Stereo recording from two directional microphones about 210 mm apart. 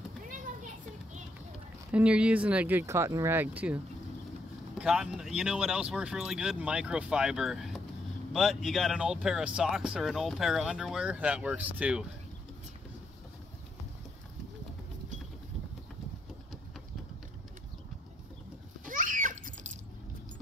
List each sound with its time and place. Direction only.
0.3 s children playing: 35° right (ahead or behind)
1.9 s speech: 5° right (ahead or behind)
18.9 s a sound: 40° right (ahead or behind)